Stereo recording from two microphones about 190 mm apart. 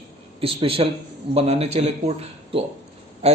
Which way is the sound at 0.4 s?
30° right (ahead or behind).